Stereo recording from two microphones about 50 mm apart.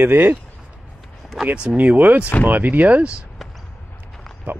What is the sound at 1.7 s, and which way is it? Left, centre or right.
Speech, right.